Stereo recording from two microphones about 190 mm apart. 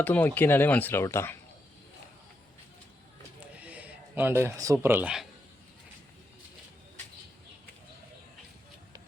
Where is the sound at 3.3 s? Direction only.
5° right (ahead or behind).